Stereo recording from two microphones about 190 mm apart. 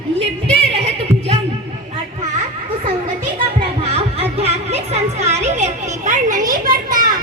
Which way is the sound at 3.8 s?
30° right (ahead or behind).